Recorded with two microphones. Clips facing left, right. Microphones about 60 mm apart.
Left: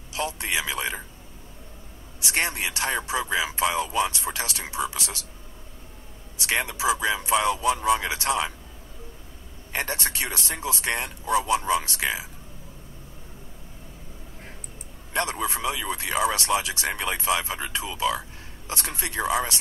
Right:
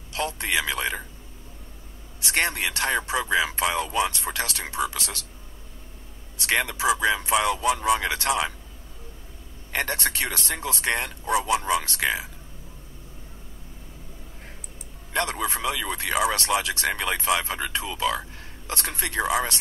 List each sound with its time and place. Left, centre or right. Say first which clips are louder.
0.1 s speech: right 2 dB; right
2.1 s speech: right 2 dB; right
6.3 s speech: right 2 dB; right
9.7 s speech: right 2 dB; right
15.1 s speech: right 1 dB; right